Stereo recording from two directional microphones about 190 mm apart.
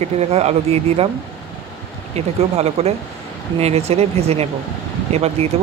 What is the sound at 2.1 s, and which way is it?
Speech, 35° right (ahead or behind).